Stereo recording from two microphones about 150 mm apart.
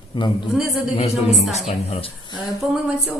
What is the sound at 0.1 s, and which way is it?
Speech, 30° left (ahead or behind).